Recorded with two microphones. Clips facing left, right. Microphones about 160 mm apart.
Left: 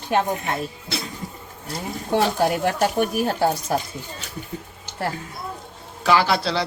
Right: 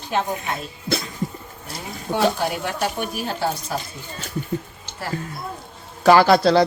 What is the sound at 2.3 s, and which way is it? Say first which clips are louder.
Speech: left 4 dB; 45° left (ahead or behind).